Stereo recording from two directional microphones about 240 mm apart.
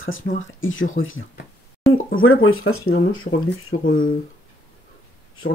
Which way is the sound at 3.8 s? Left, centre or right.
Left.